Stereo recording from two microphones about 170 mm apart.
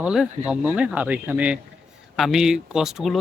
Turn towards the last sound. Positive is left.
turn(degrees=0)  # may be behind; listen again after turning